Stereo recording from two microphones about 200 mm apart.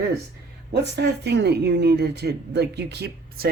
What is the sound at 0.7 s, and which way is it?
Speech, 55° right (ahead or behind).